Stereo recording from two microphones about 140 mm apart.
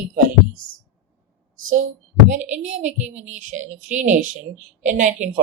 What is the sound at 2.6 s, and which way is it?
Speech, 60° right (ahead or behind).